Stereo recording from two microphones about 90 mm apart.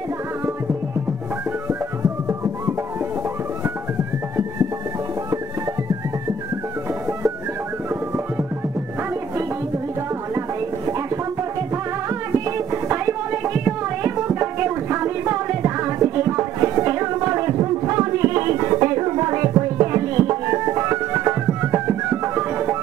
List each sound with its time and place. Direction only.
12.4 s music: 30° right (ahead or behind)